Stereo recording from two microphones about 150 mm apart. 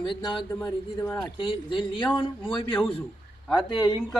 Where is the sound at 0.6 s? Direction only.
20° left (ahead or behind).